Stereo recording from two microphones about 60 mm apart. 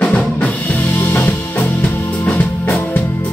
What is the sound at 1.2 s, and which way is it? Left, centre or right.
Music, left.